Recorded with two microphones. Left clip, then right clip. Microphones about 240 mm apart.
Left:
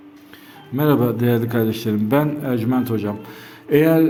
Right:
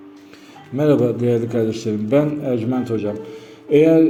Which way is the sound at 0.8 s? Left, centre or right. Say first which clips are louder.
Right 2 dB; left.